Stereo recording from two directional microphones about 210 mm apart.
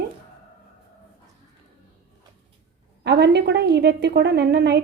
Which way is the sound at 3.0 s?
55° right (ahead or behind).